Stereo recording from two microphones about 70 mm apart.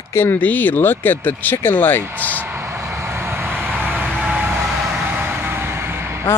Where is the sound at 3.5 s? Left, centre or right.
Centre.